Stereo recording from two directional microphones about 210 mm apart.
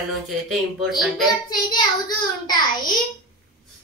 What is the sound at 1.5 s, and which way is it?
A child's voice, 20° left (ahead or behind).